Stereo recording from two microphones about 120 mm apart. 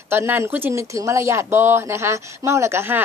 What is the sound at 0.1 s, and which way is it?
A woman's voice, 20° right (ahead or behind).